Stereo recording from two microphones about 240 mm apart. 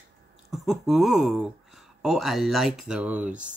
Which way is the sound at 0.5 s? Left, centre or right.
Centre.